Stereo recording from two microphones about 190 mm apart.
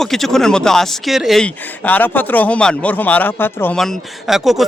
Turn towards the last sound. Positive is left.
turn(degrees=0)  # may be behind; listen again after turning